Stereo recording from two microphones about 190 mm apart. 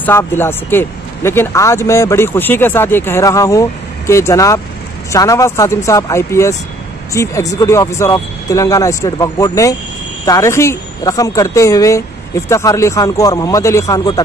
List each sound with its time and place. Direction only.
0.0 s a woman's voice: 10° left (ahead or behind)